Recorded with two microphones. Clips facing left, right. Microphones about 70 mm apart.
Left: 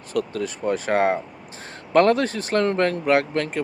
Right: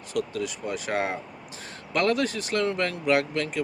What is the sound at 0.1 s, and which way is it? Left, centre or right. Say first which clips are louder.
Speech: left 4 dB; left.